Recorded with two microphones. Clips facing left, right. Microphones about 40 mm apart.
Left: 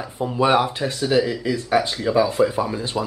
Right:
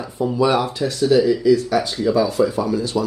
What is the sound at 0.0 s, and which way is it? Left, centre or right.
Speech, left.